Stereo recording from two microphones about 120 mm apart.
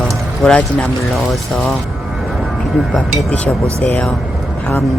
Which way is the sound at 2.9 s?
5° left (ahead or behind).